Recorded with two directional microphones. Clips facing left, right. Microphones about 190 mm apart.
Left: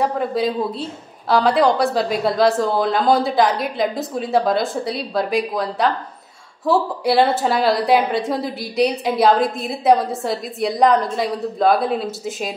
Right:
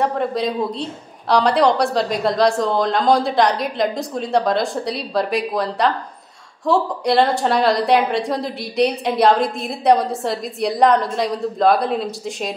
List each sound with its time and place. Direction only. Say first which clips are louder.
0.0 s a woman's voice: even; centre (ahead or behind)